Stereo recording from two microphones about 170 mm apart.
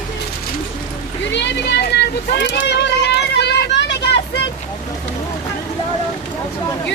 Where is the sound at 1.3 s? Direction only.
90° left.